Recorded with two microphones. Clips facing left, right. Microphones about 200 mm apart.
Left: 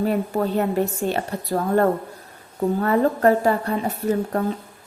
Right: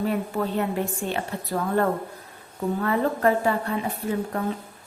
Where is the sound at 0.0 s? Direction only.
40° left (ahead or behind).